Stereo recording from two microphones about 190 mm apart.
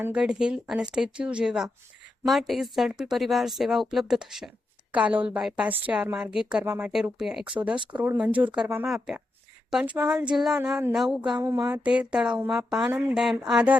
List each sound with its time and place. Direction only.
0.0 s speech: 5° right (ahead or behind)